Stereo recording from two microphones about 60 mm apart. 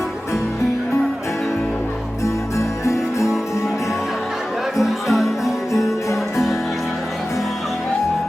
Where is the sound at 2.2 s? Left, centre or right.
Left.